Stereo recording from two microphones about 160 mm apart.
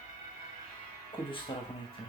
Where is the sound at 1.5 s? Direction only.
30° left (ahead or behind).